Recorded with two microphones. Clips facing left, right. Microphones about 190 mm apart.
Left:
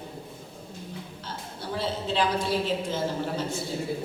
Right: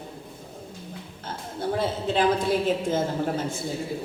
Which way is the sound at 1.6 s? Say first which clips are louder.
Right 5 dB; 50° right (ahead or behind).